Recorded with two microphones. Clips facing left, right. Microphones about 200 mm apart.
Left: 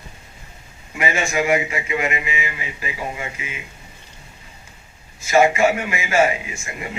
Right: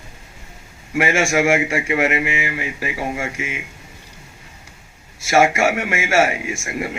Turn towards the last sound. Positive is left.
turn(degrees=-80)